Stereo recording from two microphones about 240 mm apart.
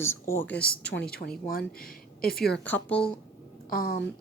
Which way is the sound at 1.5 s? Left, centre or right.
Left.